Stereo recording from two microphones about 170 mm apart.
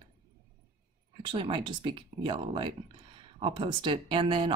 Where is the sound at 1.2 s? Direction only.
30° right (ahead or behind).